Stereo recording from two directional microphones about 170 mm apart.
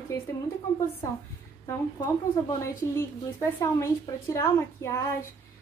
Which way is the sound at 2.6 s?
15° left (ahead or behind).